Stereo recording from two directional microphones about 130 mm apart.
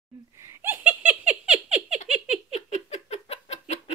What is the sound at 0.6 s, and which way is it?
Giggle, 15° right (ahead or behind).